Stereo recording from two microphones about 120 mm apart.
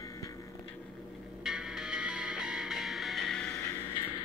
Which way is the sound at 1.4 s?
5° right (ahead or behind).